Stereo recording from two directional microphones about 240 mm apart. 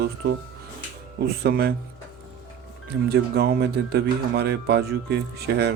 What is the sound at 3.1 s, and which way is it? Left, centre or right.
Speech, right.